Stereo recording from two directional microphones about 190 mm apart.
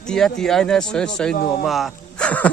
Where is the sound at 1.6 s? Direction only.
Centre (ahead or behind).